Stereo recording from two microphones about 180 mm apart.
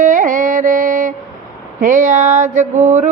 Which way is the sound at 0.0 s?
45° right (ahead or behind).